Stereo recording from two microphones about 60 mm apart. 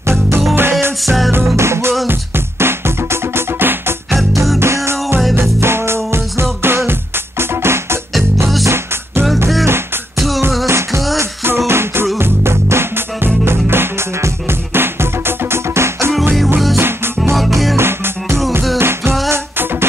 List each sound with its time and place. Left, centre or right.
0.0 s music: right
1.0 s music: centre
1.3 s music: right
4.1 s music: centre
4.6 s music: right
10.7 s music: right
17.4 s music: centre
17.7 s music: right